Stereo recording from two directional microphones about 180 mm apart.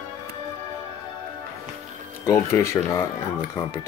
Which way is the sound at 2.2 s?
15° left (ahead or behind).